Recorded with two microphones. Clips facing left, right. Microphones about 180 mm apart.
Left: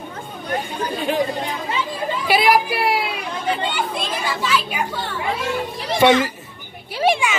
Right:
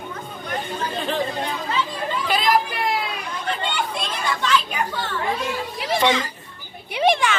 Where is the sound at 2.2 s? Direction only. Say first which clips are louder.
Left 4 dB; 10° left (ahead or behind).